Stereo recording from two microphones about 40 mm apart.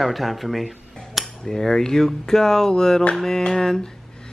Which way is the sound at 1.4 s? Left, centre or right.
Centre.